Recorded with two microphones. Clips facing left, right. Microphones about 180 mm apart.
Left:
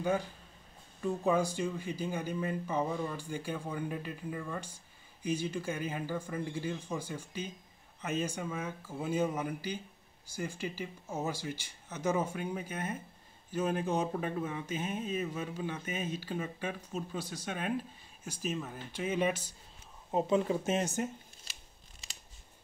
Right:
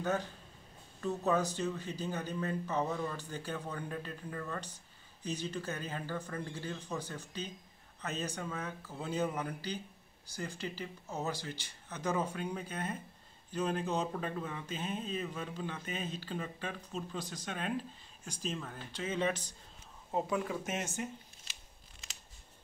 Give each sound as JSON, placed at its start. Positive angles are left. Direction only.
{"t": 0.0, "sound": "speech", "side_deg": 10}
{"t": 20.1, "sound": "speech", "side_deg": 20}